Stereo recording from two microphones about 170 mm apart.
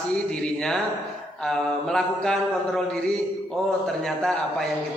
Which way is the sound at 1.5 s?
5° left (ahead or behind).